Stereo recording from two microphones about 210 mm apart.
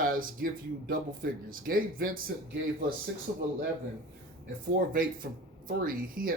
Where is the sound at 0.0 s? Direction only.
40° right (ahead or behind).